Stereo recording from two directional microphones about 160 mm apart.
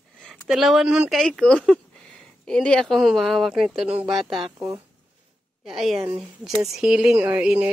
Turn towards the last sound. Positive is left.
turn(degrees=-5)  # may be behind; listen again after turning